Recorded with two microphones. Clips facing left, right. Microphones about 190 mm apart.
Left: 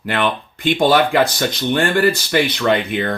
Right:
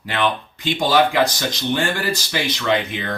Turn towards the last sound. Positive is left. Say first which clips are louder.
# left 4 dB
turn(degrees=55)  # may be behind; listen again after turning